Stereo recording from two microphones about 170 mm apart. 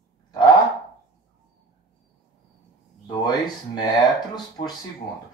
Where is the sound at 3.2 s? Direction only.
25° left (ahead or behind).